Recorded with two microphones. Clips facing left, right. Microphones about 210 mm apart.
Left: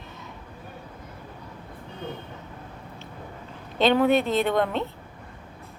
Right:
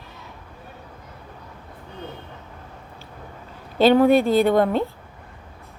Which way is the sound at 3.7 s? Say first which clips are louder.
Right 5 dB; 5° right (ahead or behind).